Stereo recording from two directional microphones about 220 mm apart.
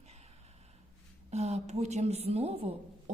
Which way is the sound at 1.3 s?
30° right (ahead or behind).